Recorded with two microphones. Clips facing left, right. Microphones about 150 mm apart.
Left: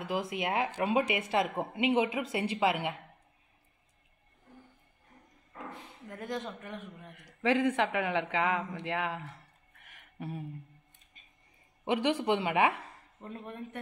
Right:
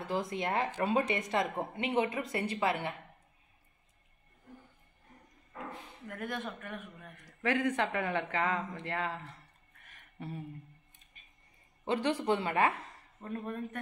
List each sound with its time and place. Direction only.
0.4 s speech: 5° left (ahead or behind)
6.0 s speech: 20° left (ahead or behind)
10.1 s a sound: 10° left (ahead or behind)
11.8 s speech: 15° left (ahead or behind)